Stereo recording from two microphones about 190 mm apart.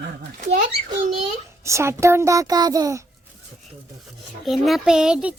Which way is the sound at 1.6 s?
15° right (ahead or behind).